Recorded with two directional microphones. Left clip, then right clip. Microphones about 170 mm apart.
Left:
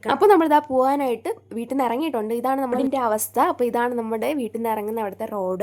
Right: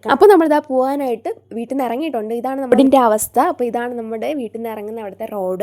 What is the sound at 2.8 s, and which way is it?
Speech, 60° right (ahead or behind).